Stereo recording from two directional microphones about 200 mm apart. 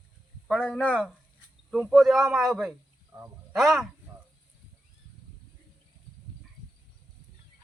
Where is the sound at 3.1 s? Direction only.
20° right (ahead or behind).